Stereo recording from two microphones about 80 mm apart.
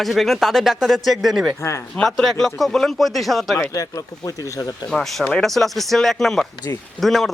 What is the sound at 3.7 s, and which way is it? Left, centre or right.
Speech, left.